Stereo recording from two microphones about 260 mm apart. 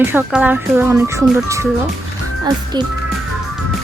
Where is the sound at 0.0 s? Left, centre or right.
Centre.